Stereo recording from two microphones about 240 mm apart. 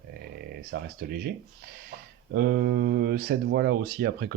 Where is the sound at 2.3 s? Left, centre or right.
Right.